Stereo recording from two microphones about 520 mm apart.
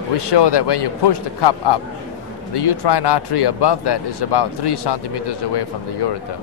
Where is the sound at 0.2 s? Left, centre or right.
Left.